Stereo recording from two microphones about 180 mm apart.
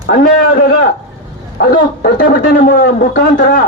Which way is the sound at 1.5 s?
55° left (ahead or behind).